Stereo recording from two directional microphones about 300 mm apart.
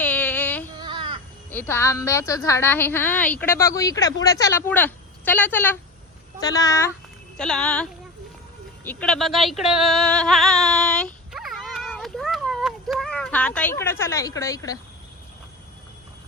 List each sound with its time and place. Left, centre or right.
0.0 s female singing: centre
0.8 s child singing: centre
1.5 s a woman's voice: centre
8.8 s a sound: centre